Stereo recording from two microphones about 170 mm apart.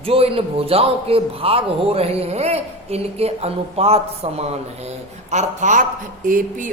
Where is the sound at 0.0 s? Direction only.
35° right (ahead or behind).